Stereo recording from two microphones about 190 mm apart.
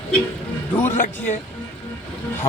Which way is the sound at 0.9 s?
40° left (ahead or behind).